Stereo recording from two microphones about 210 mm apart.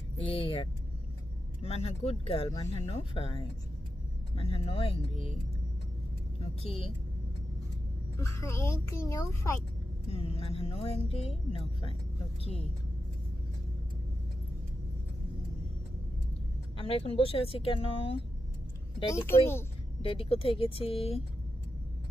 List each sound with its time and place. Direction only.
0.2 s speech: 25° left (ahead or behind)
6.4 s speech: 30° left (ahead or behind)
8.2 s a child's voice: 15° left (ahead or behind)
10.1 s speech: 30° left (ahead or behind)
16.7 s speech: 25° left (ahead or behind)
19.1 s a child's voice: 10° left (ahead or behind)
20.0 s speech: 25° left (ahead or behind)